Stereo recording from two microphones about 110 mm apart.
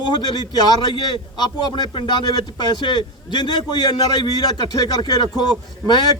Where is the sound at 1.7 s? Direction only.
45° left (ahead or behind).